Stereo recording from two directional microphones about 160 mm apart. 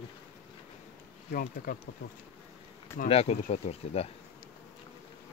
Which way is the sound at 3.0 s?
40° left (ahead or behind).